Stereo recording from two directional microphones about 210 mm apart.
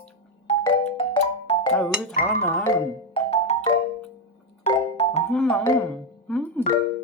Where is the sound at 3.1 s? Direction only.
25° left (ahead or behind).